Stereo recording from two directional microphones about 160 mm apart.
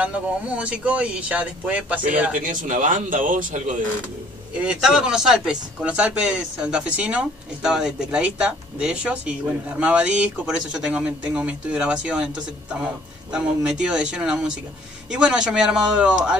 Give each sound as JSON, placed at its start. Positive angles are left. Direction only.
{"t": 0.0, "sound": "speech", "side_deg": -10}
{"t": 2.4, "sound": "speech", "side_deg": -50}
{"t": 4.6, "sound": "speech", "side_deg": -5}
{"t": 13.3, "sound": "speech", "side_deg": -5}